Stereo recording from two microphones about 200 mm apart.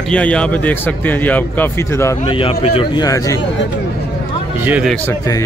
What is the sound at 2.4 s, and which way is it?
Speech, 25° left (ahead or behind).